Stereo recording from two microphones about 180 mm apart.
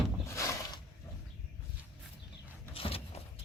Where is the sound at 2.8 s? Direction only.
30° left (ahead or behind).